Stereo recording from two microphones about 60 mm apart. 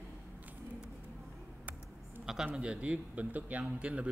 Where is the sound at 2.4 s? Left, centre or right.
Centre.